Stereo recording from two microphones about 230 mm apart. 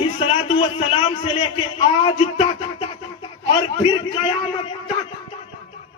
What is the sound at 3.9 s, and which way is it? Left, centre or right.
Speech, left.